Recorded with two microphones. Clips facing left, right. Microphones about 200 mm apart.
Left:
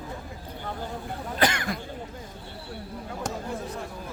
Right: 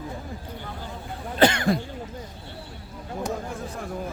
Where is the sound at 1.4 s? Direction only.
30° right (ahead or behind).